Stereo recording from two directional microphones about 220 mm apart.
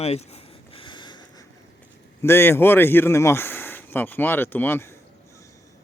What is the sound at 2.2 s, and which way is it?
Speech, 10° left (ahead or behind).